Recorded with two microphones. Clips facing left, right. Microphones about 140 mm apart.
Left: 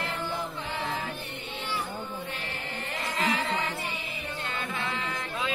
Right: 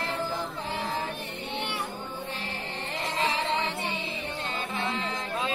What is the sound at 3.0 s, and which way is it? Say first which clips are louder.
Music: even; 30° right (ahead or behind).